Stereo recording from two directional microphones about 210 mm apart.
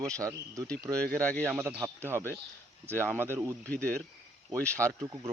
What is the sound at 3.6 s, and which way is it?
Speech, 5° left (ahead or behind).